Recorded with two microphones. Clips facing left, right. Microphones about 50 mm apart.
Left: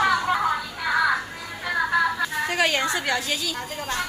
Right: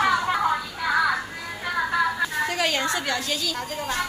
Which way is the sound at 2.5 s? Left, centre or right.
Left.